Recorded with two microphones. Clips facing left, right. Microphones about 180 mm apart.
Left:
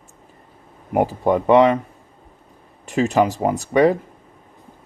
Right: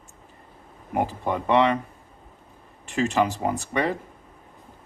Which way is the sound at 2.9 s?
45° left (ahead or behind).